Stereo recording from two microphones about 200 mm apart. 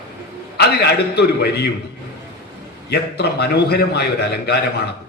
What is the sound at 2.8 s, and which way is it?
A man's voice, 55° left (ahead or behind).